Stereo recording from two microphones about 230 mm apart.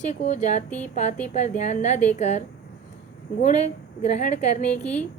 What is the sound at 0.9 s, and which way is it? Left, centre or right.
A woman's voice, left.